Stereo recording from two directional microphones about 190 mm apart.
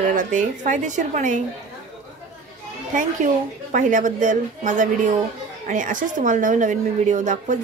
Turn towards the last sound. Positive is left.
turn(degrees=-40)  # may be behind; listen again after turning